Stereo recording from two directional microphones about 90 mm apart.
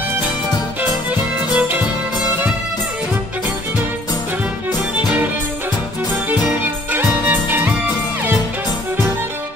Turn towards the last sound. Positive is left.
turn(degrees=-20)  # may be behind; listen again after turning